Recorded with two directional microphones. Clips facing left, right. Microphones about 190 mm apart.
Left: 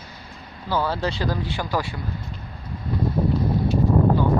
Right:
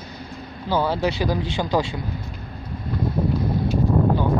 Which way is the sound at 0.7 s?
15° right (ahead or behind).